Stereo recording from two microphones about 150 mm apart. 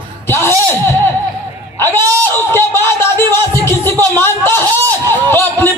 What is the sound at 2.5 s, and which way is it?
A man's voice, 15° left (ahead or behind).